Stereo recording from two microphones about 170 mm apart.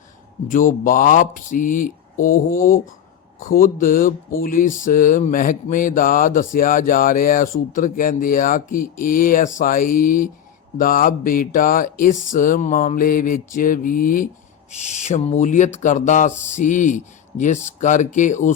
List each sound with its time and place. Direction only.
0.5 s speech: 50° left (ahead or behind)
14.7 s speech: 45° left (ahead or behind)